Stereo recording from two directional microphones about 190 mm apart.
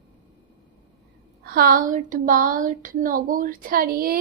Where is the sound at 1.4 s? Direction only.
50° right (ahead or behind).